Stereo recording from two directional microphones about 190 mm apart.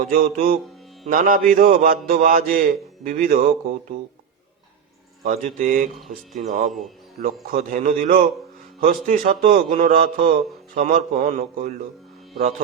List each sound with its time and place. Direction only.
0.0 s a man's voice: 50° right (ahead or behind)
5.2 s a man's voice: 40° right (ahead or behind)